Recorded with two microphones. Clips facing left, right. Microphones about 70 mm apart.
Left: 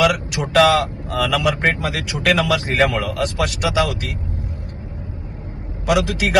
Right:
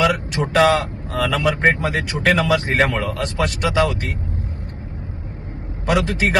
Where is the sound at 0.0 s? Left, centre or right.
Right.